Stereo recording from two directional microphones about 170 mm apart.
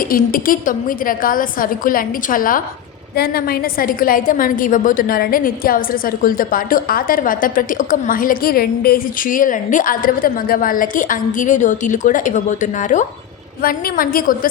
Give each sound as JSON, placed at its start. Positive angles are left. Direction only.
{"t": 0.1, "sound": "a woman's voice", "side_deg": 55}
{"t": 13.6, "sound": "a woman's voice", "side_deg": 60}